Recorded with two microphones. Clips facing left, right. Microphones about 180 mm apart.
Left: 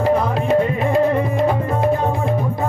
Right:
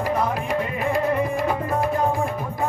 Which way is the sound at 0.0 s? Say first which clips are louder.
Left 6 dB; 25° left (ahead or behind).